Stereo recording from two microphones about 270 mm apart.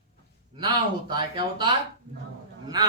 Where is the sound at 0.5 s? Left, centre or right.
Centre.